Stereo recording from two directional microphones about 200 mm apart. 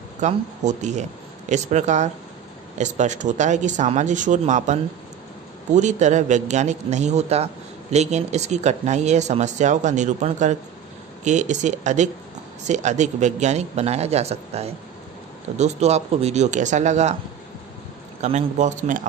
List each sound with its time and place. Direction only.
0.2 s speech: 35° right (ahead or behind)
5.8 s speech: 35° right (ahead or behind)
18.2 s speech: 35° right (ahead or behind)